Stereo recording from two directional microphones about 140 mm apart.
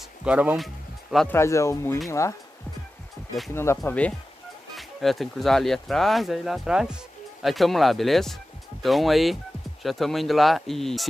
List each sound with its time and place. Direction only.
0.2 s speech: 10° right (ahead or behind)
1.3 s speech: 20° left (ahead or behind)
3.5 s speech: 20° left (ahead or behind)
4.7 s speech: centre (ahead or behind)